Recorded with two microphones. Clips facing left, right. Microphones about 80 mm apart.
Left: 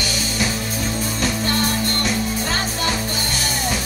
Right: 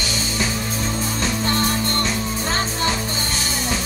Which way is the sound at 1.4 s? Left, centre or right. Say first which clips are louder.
Even; right.